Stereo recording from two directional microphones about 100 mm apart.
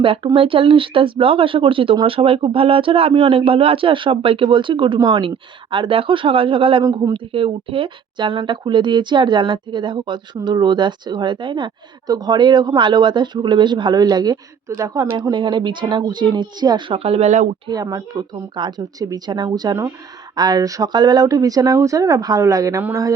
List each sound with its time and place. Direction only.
0.0 s speech: 65° right (ahead or behind); by 16.8 s 45° right (ahead or behind)
16.9 s speech: 85° right
17.7 s speech: 40° right (ahead or behind)